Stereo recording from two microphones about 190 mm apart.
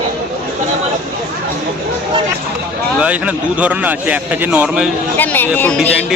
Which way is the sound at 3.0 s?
5° right (ahead or behind).